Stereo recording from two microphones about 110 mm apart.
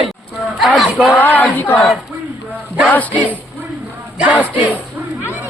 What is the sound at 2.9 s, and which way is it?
Speech, 15° left (ahead or behind).